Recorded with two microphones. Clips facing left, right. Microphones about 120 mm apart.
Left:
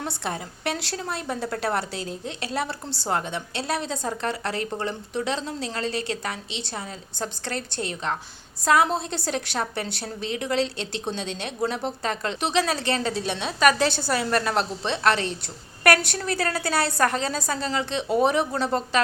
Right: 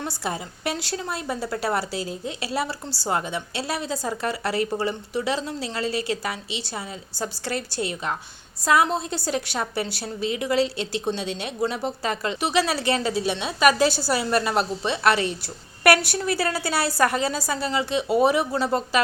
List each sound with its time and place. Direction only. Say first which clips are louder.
0.0 s a woman's voice: right 1 dB; 5° right (ahead or behind)